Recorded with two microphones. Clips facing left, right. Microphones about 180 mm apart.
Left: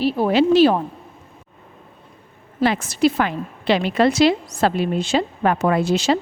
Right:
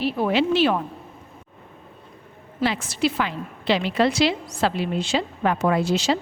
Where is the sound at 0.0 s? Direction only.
35° left (ahead or behind).